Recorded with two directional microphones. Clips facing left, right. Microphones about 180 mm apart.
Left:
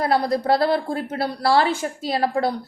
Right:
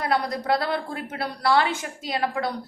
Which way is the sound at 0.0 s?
35° left (ahead or behind).